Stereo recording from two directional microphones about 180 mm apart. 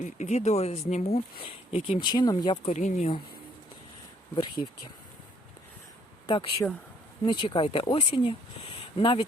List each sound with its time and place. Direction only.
0.0 s speech: 40° left (ahead or behind)
2.7 s speech: 40° left (ahead or behind)
6.2 s speech: 20° left (ahead or behind)